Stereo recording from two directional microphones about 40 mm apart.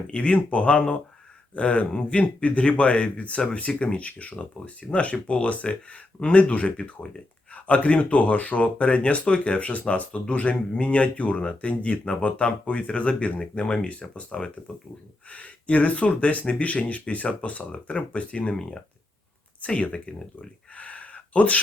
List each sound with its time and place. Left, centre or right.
0.1 s speech: left
19.6 s speech: left
20.7 s a sound: left